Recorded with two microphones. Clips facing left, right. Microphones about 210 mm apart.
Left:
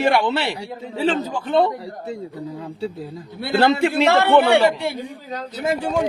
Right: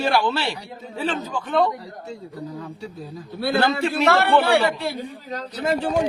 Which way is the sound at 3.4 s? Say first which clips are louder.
Left 3 dB; 25° left (ahead or behind).